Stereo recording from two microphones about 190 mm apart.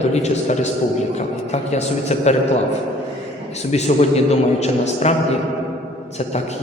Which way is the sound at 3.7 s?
35° left (ahead or behind).